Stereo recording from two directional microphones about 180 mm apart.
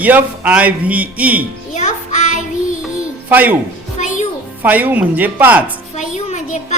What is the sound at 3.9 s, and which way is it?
Music, 40° left (ahead or behind).